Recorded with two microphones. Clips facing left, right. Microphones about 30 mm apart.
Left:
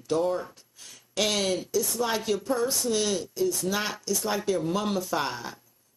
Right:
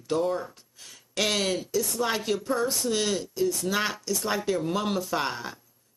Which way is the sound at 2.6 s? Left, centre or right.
Centre.